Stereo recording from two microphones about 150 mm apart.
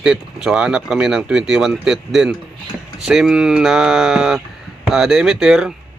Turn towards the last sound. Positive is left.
turn(degrees=-5)  # may be behind; listen again after turning